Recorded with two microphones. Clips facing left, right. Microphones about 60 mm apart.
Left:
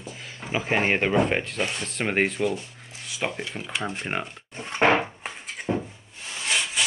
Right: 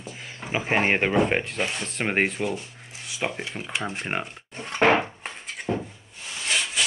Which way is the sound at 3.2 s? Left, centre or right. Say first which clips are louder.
Even; centre.